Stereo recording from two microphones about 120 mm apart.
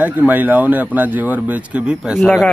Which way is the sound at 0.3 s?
15° right (ahead or behind).